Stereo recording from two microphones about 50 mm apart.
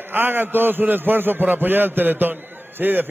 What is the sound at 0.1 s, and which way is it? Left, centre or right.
A man's voice, right.